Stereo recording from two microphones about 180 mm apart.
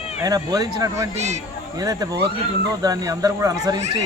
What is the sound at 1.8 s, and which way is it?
Speech, 20° right (ahead or behind).